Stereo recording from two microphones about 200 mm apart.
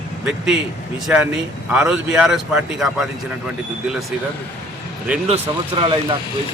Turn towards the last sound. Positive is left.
turn(degrees=-25)  # may be behind; listen again after turning